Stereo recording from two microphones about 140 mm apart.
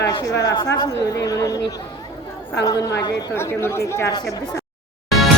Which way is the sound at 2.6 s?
25° left (ahead or behind).